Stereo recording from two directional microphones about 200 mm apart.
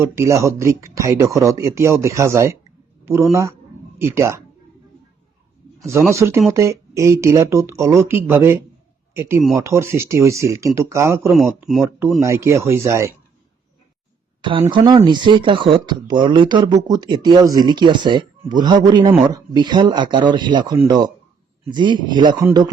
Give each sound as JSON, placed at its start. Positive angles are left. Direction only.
{"t": 0.0, "sound": "speech", "side_deg": -15}
{"t": 3.9, "sound": "speech", "side_deg": -15}
{"t": 5.8, "sound": "speech", "side_deg": -15}
{"t": 9.6, "sound": "speech", "side_deg": -15}
{"t": 11.3, "sound": "speech", "side_deg": 0}
{"t": 12.2, "sound": "speech", "side_deg": -15}
{"t": 14.7, "sound": "speech", "side_deg": -25}